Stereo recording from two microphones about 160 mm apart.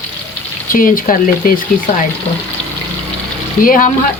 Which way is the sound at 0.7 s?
60° left (ahead or behind).